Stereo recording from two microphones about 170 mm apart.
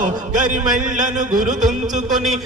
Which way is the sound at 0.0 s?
50° right (ahead or behind).